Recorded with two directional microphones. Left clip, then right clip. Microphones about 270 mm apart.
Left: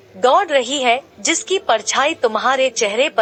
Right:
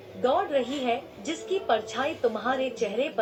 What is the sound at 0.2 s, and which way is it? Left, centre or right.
A woman's voice, left.